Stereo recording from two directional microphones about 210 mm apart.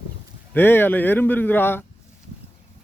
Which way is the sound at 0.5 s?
10° left (ahead or behind).